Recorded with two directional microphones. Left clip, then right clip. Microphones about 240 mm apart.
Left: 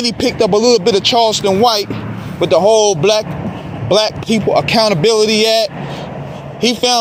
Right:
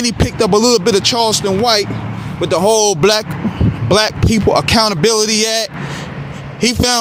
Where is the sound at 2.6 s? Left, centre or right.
Right.